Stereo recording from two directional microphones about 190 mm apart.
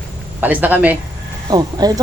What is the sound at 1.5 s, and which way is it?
Speech, 20° right (ahead or behind).